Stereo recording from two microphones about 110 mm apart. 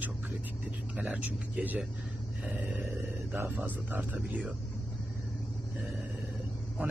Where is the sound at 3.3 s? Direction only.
20° right (ahead or behind).